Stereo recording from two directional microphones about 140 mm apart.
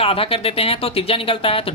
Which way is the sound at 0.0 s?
40° left (ahead or behind).